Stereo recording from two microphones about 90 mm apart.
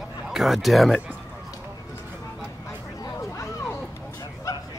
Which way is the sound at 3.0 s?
35° left (ahead or behind).